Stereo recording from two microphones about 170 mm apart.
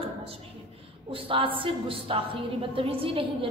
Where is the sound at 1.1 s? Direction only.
30° right (ahead or behind).